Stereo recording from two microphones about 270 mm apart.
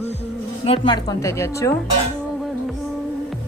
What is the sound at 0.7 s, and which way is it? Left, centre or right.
A woman's voice, centre.